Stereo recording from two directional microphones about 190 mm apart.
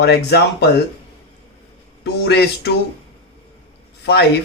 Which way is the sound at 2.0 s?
60° left (ahead or behind).